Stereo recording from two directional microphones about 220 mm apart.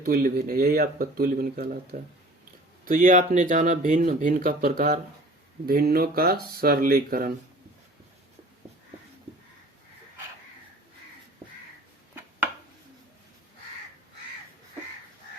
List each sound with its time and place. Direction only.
0.0 s speech: 40° right (ahead or behind)